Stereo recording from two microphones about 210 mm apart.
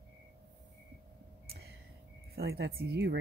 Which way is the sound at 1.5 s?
50° right (ahead or behind).